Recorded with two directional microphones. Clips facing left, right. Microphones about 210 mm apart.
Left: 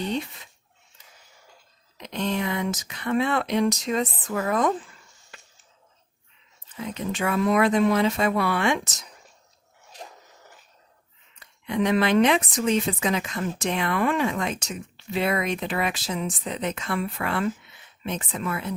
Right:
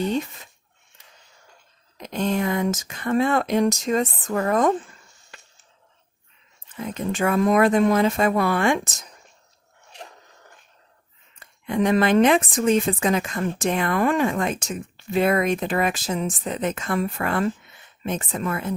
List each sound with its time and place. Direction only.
0.1 s speech: 45° right (ahead or behind)
2.0 s speech: 45° right (ahead or behind)
6.7 s speech: 45° right (ahead or behind)
10.2 s a sound: 5° left (ahead or behind)
11.3 s speech: 50° right (ahead or behind)